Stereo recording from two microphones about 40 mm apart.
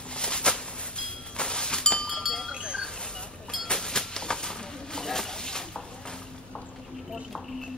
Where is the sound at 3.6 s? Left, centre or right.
Centre.